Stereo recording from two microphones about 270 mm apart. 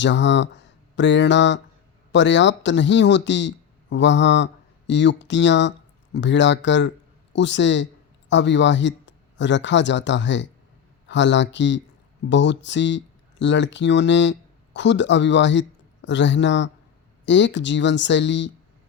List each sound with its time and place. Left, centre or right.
0.0 s speech: left